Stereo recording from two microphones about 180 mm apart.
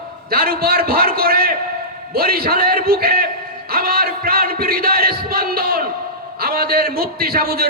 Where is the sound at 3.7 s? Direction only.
55° right (ahead or behind).